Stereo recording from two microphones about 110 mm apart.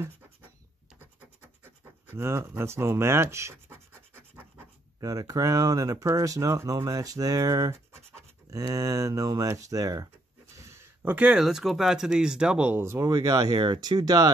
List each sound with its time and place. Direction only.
2.1 s scratch: 25° right (ahead or behind)
5.0 s speech: 35° right (ahead or behind)
10.6 s a sound: 25° right (ahead or behind)
11.1 s speech: 10° right (ahead or behind)
12.8 s speech: 25° right (ahead or behind)